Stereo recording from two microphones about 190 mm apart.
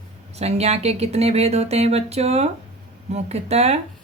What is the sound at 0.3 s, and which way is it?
Speech, 35° right (ahead or behind).